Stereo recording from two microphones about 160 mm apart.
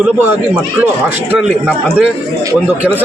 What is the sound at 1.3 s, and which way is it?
Speech, 5° right (ahead or behind).